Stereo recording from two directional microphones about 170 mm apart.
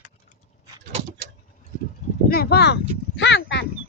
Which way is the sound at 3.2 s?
90° left.